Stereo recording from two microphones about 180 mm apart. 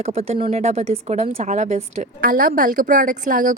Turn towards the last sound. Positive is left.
turn(degrees=-45)  # may be behind; listen again after turning